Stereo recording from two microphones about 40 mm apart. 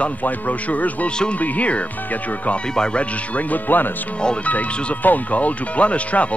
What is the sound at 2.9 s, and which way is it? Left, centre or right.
Speech, left.